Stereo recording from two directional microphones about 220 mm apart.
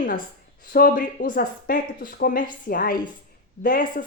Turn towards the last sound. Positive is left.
turn(degrees=40)  # may be behind; listen again after turning